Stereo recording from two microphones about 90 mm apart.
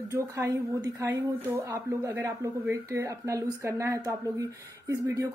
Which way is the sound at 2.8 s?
35° right (ahead or behind).